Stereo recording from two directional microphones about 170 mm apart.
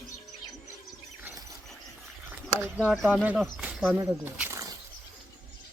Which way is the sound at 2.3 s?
10° right (ahead or behind).